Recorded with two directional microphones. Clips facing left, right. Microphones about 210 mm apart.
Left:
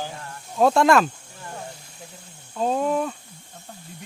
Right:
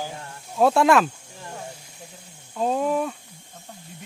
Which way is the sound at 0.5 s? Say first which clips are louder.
Even; 5° right (ahead or behind).